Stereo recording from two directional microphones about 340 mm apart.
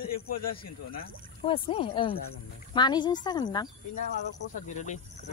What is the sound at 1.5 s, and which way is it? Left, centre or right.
Speech, centre.